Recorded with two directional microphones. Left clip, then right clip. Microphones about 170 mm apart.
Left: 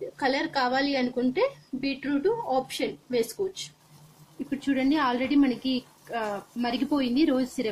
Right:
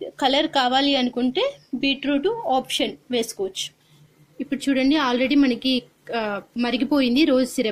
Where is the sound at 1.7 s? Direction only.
10° right (ahead or behind).